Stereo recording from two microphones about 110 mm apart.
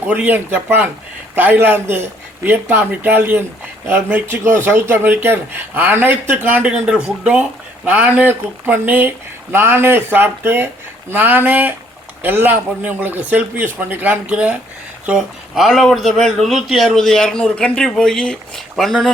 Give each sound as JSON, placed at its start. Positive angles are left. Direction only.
{"t": 0.1, "sound": "a man's voice", "side_deg": -15}